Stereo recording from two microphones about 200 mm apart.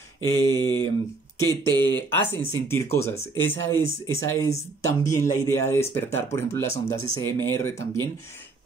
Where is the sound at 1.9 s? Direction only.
10° left (ahead or behind).